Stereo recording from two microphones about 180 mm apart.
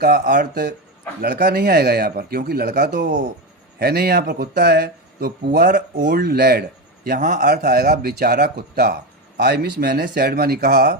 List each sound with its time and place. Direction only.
0.0 s speech: 50° right (ahead or behind)
3.8 s speech: 60° right (ahead or behind)
7.2 s speech: 45° right (ahead or behind)